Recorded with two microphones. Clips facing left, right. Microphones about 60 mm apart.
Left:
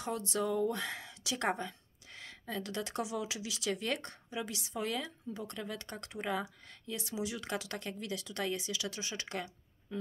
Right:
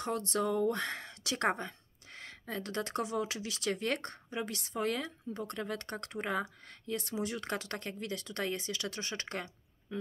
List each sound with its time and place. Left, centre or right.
0.0 s speech: right